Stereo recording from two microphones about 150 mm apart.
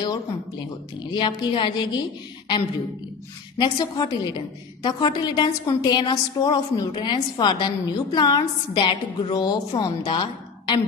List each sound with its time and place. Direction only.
1.1 s a woman's voice: 30° left (ahead or behind)
3.5 s a woman's voice: 30° left (ahead or behind)